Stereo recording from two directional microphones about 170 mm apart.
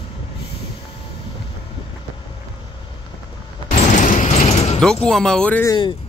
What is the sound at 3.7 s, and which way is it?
Mechanisms, 45° left (ahead or behind).